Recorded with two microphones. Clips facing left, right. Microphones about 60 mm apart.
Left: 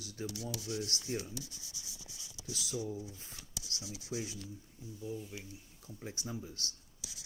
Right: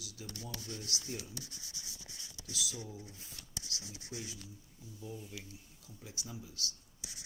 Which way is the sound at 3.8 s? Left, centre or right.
Centre.